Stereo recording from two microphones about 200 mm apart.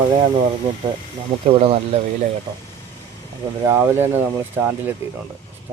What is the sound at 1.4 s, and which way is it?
Speech, 30° right (ahead or behind).